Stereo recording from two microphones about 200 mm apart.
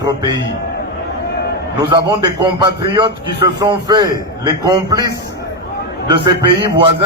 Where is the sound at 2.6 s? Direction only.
20° right (ahead or behind).